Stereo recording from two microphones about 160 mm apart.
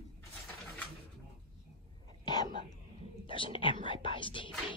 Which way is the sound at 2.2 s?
25° left (ahead or behind).